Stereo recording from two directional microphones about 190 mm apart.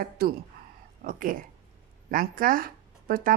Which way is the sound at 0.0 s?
50° right (ahead or behind).